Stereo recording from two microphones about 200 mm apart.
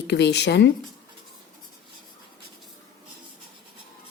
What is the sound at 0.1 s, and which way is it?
Speech, 60° left (ahead or behind).